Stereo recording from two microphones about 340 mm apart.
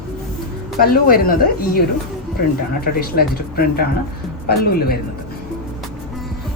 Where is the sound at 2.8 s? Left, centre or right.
Left.